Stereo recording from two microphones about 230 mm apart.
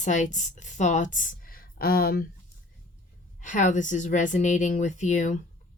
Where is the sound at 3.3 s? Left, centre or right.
Left.